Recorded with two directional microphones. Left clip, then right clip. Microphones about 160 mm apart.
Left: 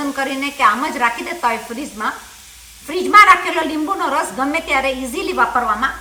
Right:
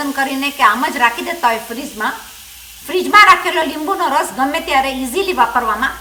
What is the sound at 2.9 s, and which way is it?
A woman's voice, 30° right (ahead or behind).